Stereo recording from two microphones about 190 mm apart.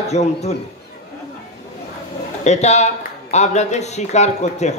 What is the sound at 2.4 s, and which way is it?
A man's voice, 35° left (ahead or behind).